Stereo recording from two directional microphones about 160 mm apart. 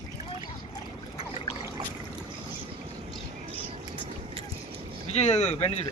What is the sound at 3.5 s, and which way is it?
Vehicle, 35° right (ahead or behind).